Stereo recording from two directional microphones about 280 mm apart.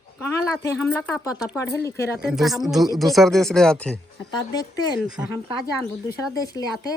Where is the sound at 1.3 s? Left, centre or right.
Centre.